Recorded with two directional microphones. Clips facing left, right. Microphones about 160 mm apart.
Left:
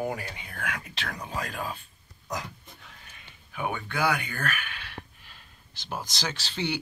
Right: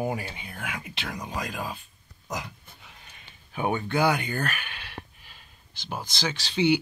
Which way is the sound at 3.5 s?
25° right (ahead or behind).